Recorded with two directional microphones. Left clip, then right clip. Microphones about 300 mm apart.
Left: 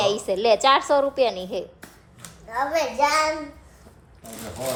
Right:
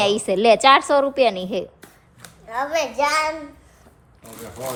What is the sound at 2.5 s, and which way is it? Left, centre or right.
Speech, right.